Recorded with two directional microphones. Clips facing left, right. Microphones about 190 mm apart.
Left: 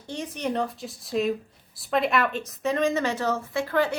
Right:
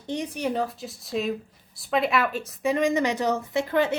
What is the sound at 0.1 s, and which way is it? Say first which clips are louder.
Speech: right 4 dB; 15° right (ahead or behind).